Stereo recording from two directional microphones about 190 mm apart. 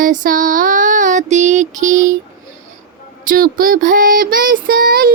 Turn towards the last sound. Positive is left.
turn(degrees=-50)  # may be behind; listen again after turning